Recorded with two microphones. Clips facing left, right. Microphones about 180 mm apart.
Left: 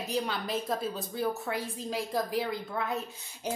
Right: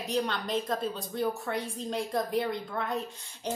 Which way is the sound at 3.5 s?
10° left (ahead or behind).